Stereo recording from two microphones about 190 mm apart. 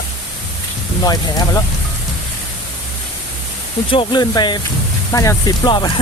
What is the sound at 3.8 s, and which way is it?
Speech, 25° left (ahead or behind).